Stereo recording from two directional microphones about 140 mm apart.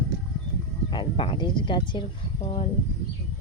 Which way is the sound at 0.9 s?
35° left (ahead or behind).